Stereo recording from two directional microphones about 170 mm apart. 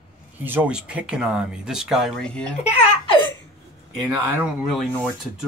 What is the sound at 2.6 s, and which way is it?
Baby laughter, 35° left (ahead or behind).